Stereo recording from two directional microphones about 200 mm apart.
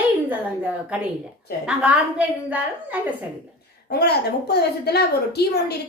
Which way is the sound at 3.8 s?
55° left (ahead or behind).